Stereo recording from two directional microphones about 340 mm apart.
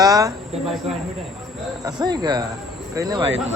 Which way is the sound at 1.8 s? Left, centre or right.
Centre.